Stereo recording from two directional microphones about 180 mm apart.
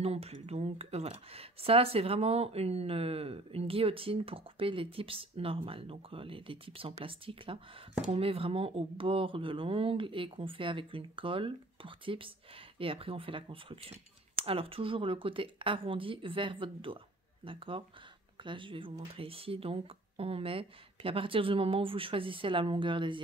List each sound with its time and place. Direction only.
0.0 s speech: 35° right (ahead or behind)